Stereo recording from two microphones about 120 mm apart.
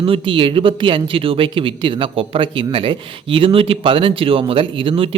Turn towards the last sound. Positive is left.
turn(degrees=-50)  # may be behind; listen again after turning